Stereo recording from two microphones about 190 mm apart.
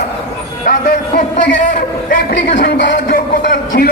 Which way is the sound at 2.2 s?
60° left (ahead or behind).